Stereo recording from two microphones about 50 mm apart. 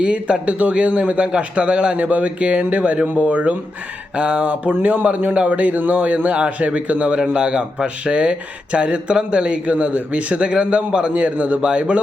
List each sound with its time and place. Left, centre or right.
0.0 s a man's voice: right
4.4 s a man's voice: right